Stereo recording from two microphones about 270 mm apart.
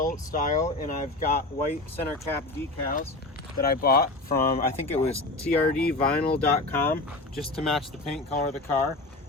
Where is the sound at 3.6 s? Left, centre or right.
Left.